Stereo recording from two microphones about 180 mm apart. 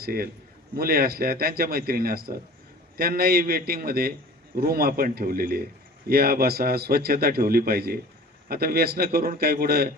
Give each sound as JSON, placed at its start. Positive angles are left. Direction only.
{"t": 0.0, "sound": "a man's voice", "side_deg": -55}